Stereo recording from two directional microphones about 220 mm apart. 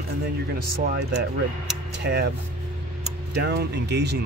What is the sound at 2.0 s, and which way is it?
Speech, 50° right (ahead or behind).